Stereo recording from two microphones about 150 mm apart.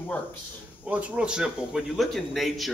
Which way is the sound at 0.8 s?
10° right (ahead or behind).